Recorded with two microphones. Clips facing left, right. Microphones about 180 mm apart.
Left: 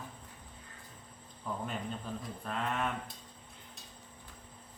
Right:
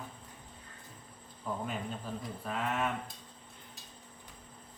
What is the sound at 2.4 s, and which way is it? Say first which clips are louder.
Speech: right 1 dB; 5° right (ahead or behind).